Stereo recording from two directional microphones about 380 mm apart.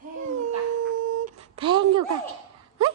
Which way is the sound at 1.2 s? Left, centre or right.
Centre.